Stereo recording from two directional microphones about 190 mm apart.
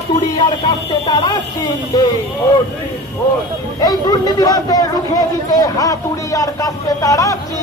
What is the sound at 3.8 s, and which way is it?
A man's voice, 20° left (ahead or behind).